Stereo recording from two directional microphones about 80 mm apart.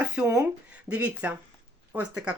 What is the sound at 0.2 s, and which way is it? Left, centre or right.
Speech, centre.